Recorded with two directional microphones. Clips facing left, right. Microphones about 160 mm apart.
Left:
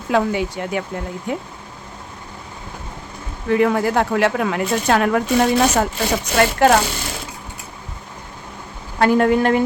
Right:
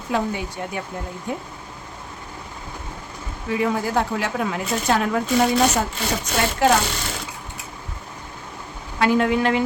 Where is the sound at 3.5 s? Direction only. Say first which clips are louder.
Left 5 dB; 65° left (ahead or behind).